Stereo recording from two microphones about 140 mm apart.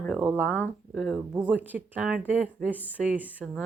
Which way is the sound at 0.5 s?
10° left (ahead or behind).